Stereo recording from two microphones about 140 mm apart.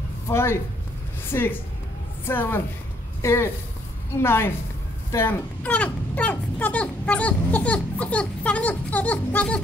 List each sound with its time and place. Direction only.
0.3 s speech: 20° left (ahead or behind)